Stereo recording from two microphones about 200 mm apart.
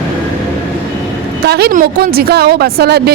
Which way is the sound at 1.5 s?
55° right (ahead or behind).